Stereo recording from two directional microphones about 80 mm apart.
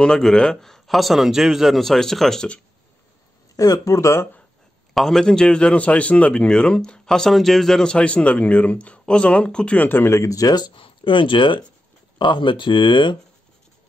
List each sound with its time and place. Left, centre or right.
0.0 s speech: centre
3.5 s speech: left
4.9 s a man's voice: centre
9.8 s speech: left
10.2 s speech: left